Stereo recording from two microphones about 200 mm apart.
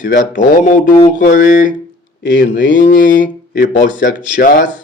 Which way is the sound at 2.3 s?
65° left (ahead or behind).